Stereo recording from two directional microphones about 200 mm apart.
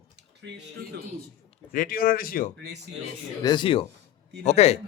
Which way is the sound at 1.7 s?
45° left (ahead or behind).